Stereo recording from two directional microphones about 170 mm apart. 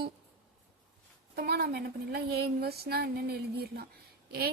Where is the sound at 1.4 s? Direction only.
70° right (ahead or behind).